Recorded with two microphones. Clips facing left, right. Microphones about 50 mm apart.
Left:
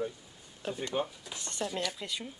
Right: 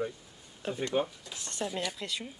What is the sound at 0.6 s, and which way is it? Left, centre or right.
Speech, centre.